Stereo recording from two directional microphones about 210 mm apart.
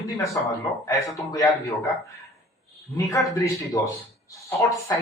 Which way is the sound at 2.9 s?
15° left (ahead or behind).